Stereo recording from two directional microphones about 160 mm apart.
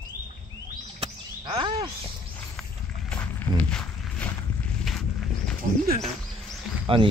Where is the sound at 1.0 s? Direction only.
35° right (ahead or behind).